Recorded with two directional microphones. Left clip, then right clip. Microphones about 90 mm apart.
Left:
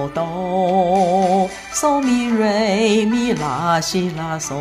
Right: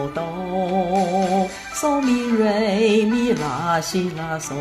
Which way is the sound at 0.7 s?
35° left (ahead or behind).